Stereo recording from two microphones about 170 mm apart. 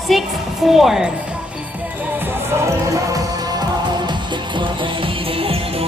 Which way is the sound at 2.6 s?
20° right (ahead or behind).